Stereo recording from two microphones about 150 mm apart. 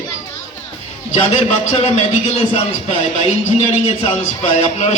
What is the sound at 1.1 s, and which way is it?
A man's voice, 45° left (ahead or behind).